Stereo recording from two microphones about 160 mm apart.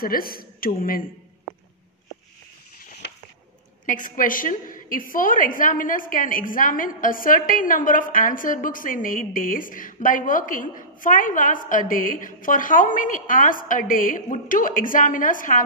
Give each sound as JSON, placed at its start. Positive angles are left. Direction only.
{"t": 0.0, "sound": "a woman's voice", "side_deg": 65}
{"t": 3.0, "sound": "a sound", "side_deg": 90}
{"t": 3.8, "sound": "a woman's voice", "side_deg": 55}